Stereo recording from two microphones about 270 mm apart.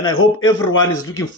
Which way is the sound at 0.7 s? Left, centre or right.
Left.